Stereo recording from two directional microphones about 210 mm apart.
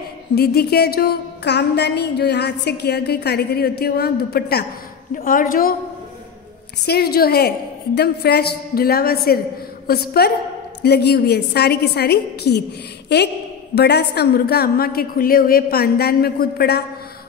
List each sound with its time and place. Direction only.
0.3 s a woman's voice: 50° left (ahead or behind)
6.9 s a woman's voice: 50° left (ahead or behind)